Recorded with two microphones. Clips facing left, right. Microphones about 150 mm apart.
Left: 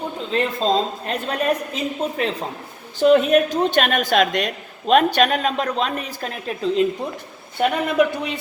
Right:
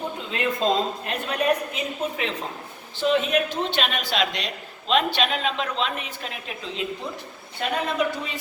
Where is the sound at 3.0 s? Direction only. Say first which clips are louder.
Left 8 dB; 50° left (ahead or behind).